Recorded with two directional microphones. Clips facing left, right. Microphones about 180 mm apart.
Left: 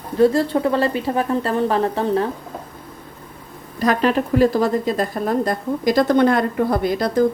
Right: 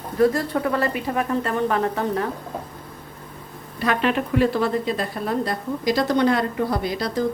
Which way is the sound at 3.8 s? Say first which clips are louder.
Left 4 dB; 40° left (ahead or behind).